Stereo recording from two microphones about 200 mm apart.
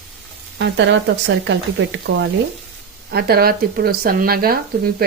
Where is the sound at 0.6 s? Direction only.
65° right (ahead or behind).